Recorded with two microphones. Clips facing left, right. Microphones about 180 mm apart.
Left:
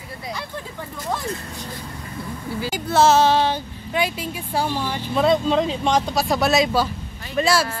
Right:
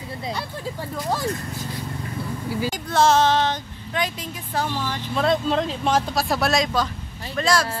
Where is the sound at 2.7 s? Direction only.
5° left (ahead or behind).